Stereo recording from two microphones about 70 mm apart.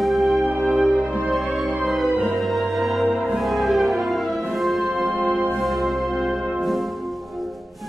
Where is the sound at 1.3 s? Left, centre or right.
Centre.